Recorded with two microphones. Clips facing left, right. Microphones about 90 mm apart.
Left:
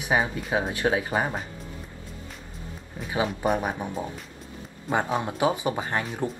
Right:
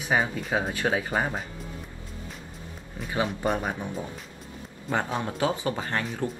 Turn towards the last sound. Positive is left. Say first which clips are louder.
# left 1 dB
turn(degrees=20)  # may be behind; listen again after turning